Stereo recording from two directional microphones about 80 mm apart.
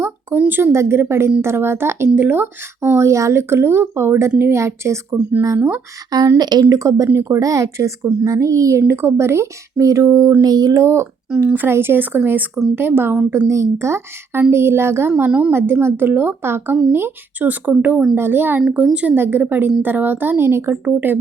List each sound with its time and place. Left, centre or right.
0.0 s speech: right
5.5 s speech: right
6.1 s a woman's voice: right
15.3 s speech: centre
15.5 s speech: right